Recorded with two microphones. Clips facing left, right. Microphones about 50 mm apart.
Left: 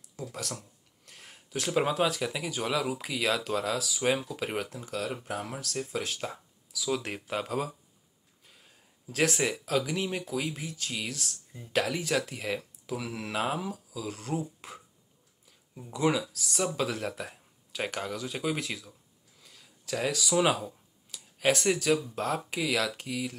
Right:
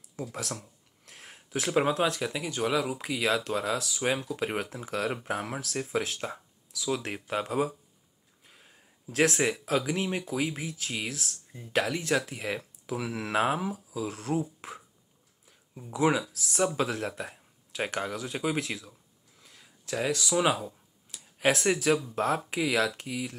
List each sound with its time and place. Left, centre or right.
0.1 s speech: centre
4.9 s speech: right
5.7 s speech: centre
6.0 s speech: centre
13.0 s speech: right; by 18.9 s centre
19.4 s clicking: centre
21.8 s speech: centre